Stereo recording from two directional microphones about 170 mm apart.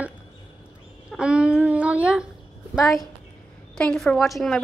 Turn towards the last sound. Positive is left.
turn(degrees=0)  # may be behind; listen again after turning